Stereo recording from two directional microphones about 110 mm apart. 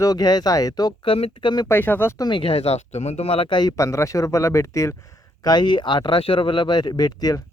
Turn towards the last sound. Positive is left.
turn(degrees=35)  # may be behind; listen again after turning